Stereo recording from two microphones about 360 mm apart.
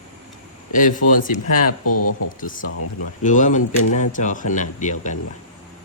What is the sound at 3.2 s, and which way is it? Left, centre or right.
Speech, left.